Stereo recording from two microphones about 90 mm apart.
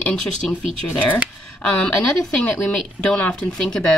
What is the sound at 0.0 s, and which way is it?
Speech, 5° left (ahead or behind).